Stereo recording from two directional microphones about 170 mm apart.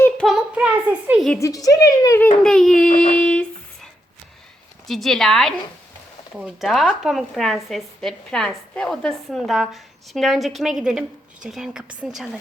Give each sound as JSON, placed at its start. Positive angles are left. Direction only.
{"t": 0.0, "sound": "child singing", "side_deg": 0}
{"t": 1.4, "sound": "speech", "side_deg": 20}
{"t": 2.4, "sound": "speech", "side_deg": 5}
{"t": 3.1, "sound": "a sound", "side_deg": 5}
{"t": 4.9, "sound": "speech", "side_deg": 0}